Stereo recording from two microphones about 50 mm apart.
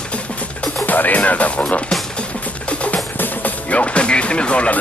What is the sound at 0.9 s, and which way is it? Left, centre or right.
Music, left.